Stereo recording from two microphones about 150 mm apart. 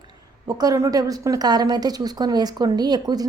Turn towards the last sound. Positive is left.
turn(degrees=-25)  # may be behind; listen again after turning